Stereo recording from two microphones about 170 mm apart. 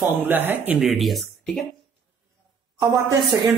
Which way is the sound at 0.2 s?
10° right (ahead or behind).